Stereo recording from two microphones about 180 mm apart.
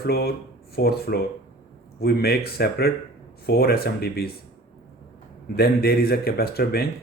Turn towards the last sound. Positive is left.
turn(degrees=60)  # may be behind; listen again after turning